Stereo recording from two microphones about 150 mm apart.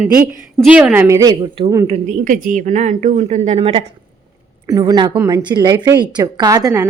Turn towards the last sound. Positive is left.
turn(degrees=-20)  # may be behind; listen again after turning